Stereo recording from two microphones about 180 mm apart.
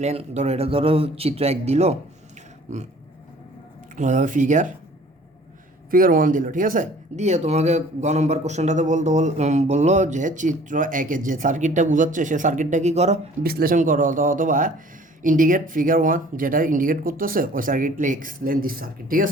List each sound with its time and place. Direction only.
0.0 s speech: 40° right (ahead or behind)
3.9 s speech: 45° right (ahead or behind)
5.9 s speech: 50° right (ahead or behind)
13.4 s speech: 55° right (ahead or behind)